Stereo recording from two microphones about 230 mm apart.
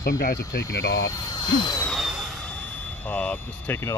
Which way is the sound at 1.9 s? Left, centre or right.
Centre.